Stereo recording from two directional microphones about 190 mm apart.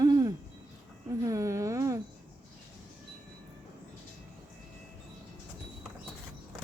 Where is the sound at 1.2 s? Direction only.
15° right (ahead or behind).